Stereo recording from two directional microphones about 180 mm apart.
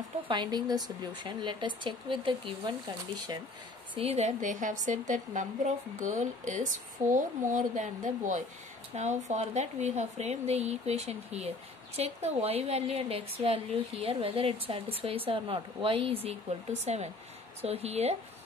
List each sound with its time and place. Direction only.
0.3 s speech: 25° right (ahead or behind)
3.9 s speech: 35° right (ahead or behind)